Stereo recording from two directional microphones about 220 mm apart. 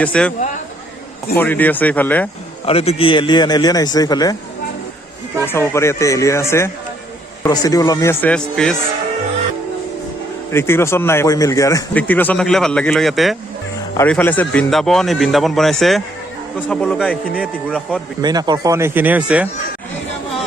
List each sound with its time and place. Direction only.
0.0 s a man's voice: 5° left (ahead or behind)
1.4 s speech: 5° left (ahead or behind)
2.6 s a man's voice: 25° left (ahead or behind)
5.5 s speech: 10° left (ahead or behind)
10.5 s a man's voice: 10° left (ahead or behind)
18.2 s speech: 20° right (ahead or behind)